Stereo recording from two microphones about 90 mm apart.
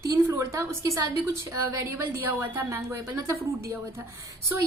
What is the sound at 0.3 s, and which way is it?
A woman's voice, 35° right (ahead or behind).